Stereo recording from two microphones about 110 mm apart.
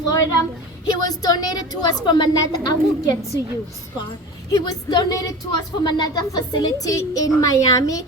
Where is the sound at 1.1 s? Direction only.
35° left (ahead or behind).